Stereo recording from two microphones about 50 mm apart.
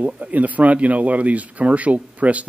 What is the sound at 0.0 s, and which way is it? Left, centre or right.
Speech, right.